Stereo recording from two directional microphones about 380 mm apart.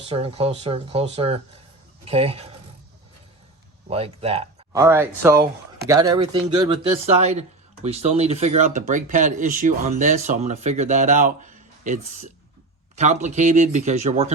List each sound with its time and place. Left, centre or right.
0.0 s speech: centre
3.8 s speech: centre